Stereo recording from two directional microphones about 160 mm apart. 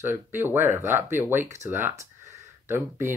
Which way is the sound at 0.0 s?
15° right (ahead or behind).